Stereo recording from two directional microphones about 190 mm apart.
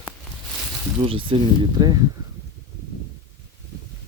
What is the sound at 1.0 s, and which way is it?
Speech, 30° right (ahead or behind).